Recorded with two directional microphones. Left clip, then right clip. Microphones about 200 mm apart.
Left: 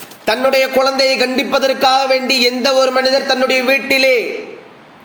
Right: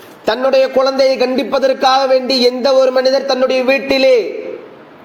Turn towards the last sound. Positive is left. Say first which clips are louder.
# right 2 dB
turn(degrees=0)  # may be behind; listen again after turning